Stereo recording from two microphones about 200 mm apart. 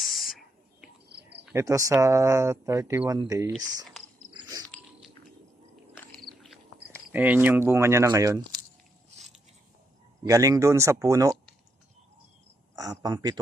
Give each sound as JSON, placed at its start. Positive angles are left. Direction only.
{"t": 0.0, "sound": "a sound", "side_deg": 0}
{"t": 1.5, "sound": "speech", "side_deg": -15}
{"t": 6.0, "sound": "cricket", "side_deg": 5}
{"t": 10.2, "sound": "speech", "side_deg": -15}
{"t": 12.7, "sound": "speech", "side_deg": -20}